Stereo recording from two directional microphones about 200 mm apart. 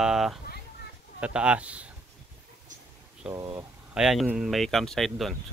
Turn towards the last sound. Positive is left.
turn(degrees=0)  # may be behind; listen again after turning